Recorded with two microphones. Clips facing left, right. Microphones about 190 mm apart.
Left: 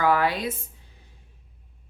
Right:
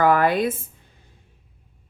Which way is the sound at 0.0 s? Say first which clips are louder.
Right 5 dB; 50° right (ahead or behind).